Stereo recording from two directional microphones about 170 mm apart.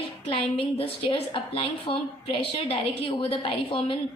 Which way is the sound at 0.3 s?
30° left (ahead or behind).